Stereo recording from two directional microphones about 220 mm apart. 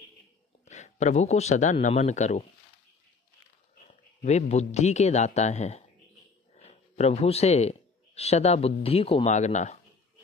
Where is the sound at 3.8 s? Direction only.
30° left (ahead or behind).